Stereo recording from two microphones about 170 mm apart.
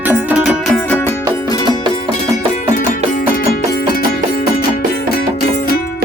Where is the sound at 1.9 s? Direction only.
40° left (ahead or behind).